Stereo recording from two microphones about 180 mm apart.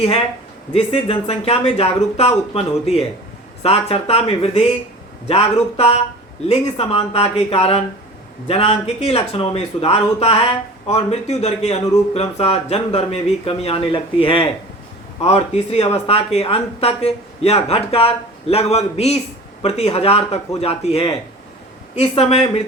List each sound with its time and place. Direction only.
0.7 s speech: 35° left (ahead or behind)